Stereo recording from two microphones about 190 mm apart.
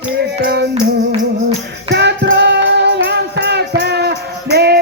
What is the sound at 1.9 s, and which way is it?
Music, 60° right (ahead or behind).